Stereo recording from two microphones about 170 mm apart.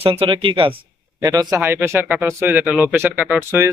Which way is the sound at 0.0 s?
35° right (ahead or behind).